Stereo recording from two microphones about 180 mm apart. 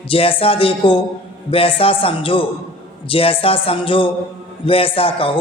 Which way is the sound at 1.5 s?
30° left (ahead or behind).